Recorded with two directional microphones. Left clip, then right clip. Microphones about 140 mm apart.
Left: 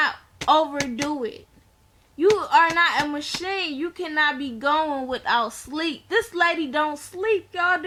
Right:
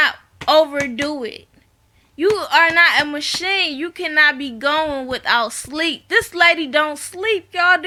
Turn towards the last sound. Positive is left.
turn(degrees=-15)  # may be behind; listen again after turning